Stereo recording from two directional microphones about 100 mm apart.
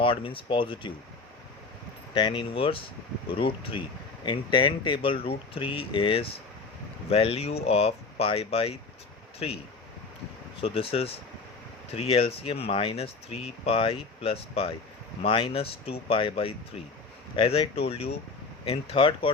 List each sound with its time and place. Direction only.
0.0 s speech: 60° left (ahead or behind)
2.1 s speech: 55° left (ahead or behind)
7.1 s speech: 80° left
10.6 s speech: 70° left (ahead or behind)
11.9 s speech: 90° left
18.6 s speech: 70° left (ahead or behind)